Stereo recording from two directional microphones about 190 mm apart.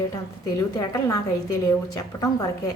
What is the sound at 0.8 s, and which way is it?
Speech, 15° left (ahead or behind).